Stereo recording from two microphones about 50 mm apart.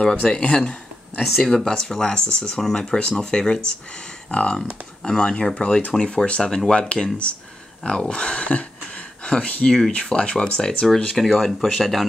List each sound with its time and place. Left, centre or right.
0.0 s speech: centre
1.2 s speech: centre
11.1 s speech: centre